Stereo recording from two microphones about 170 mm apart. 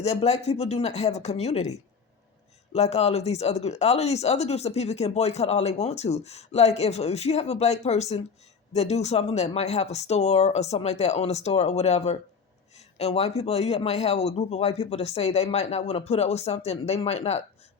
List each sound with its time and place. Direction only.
0.0 s speech: 40° left (ahead or behind)
2.7 s speech: 40° left (ahead or behind)